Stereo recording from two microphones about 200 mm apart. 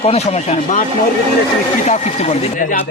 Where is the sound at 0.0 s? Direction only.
30° left (ahead or behind).